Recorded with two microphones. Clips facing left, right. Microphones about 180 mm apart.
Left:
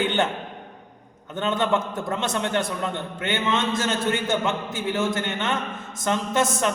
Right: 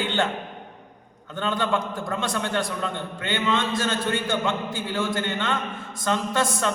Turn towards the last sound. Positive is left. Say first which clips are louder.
# left 2 dB
turn(degrees=20)  # may be behind; listen again after turning